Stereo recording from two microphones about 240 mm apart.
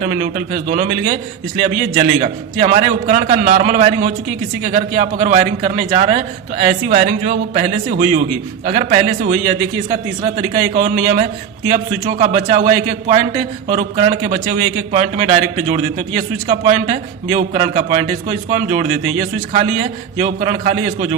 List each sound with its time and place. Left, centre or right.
0.0 s a man's voice: right
20.1 s a man's voice: right